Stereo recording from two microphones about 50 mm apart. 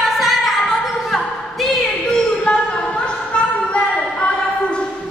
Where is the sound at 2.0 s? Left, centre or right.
Centre.